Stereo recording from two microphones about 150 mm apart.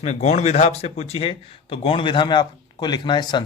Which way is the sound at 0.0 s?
50° left (ahead or behind).